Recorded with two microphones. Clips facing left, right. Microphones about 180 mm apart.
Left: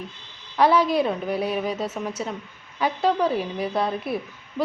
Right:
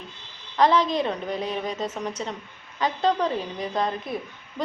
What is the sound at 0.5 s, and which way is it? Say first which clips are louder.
A woman's voice: left 2 dB; 10° left (ahead or behind).